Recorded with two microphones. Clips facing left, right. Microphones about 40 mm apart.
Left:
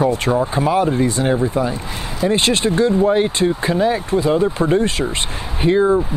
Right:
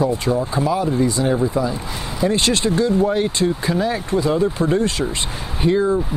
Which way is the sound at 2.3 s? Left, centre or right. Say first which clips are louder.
Left 2 dB; left.